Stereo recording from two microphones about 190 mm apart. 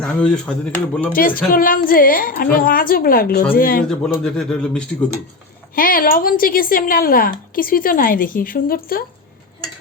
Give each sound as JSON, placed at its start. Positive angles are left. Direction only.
{"t": 0.0, "sound": "speech", "side_deg": 5}
{"t": 1.1, "sound": "a woman's voice", "side_deg": 50}
{"t": 3.8, "sound": "speech", "side_deg": 5}
{"t": 5.7, "sound": "a woman's voice", "side_deg": 50}